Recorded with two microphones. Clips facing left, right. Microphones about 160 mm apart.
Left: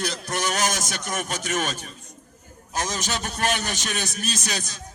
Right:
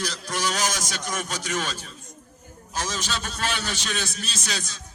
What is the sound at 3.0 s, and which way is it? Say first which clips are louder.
Speech: left 2 dB; 15° left (ahead or behind).